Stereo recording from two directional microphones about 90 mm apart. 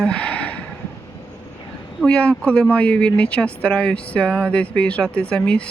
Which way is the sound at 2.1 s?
15° left (ahead or behind).